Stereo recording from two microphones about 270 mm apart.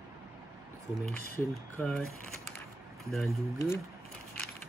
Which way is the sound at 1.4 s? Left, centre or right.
Centre.